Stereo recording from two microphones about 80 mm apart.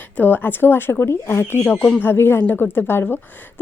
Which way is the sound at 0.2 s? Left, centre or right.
Left.